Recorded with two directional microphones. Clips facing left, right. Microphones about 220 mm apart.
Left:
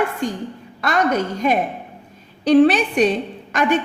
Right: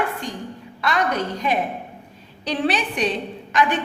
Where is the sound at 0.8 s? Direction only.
45° left (ahead or behind).